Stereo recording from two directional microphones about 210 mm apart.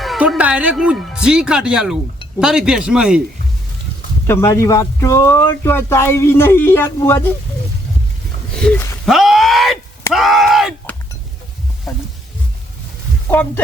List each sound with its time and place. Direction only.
0.0 s speech: centre (ahead or behind)
4.3 s speech: 10° left (ahead or behind)
8.5 s a sound: 5° left (ahead or behind)
9.0 s groan: centre (ahead or behind)